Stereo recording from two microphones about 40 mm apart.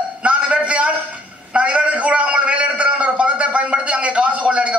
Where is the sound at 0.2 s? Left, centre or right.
Right.